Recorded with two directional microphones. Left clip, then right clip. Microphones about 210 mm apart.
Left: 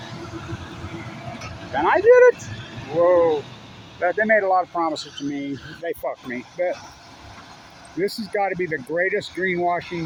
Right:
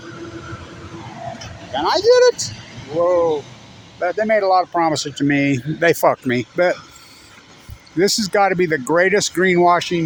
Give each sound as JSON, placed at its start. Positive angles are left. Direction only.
{"t": 1.7, "sound": "speech", "side_deg": -20}
{"t": 4.7, "sound": "speech", "side_deg": -45}
{"t": 7.9, "sound": "speech", "side_deg": -55}